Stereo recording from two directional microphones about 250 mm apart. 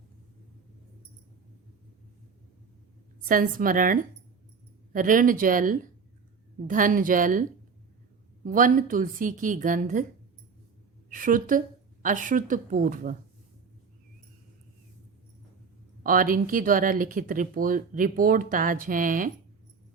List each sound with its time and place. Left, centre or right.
3.2 s speech: right
4.9 s speech: right
8.4 s speech: right
11.1 s speech: right
16.0 s speech: right